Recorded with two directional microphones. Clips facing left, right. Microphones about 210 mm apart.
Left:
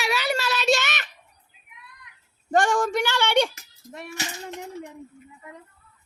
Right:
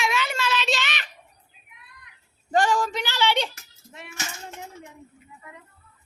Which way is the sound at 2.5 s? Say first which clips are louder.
Left 1 dB; 50° left (ahead or behind).